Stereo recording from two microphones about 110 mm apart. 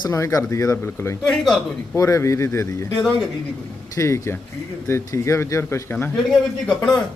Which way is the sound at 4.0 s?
25° left (ahead or behind).